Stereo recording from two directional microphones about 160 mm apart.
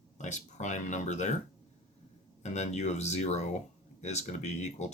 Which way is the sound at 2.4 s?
45° left (ahead or behind).